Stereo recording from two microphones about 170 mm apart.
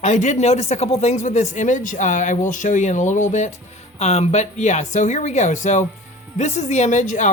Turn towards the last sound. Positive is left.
turn(degrees=45)  # may be behind; listen again after turning